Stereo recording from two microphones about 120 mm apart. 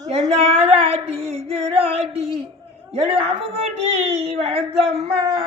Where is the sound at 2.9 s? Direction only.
55° right (ahead or behind).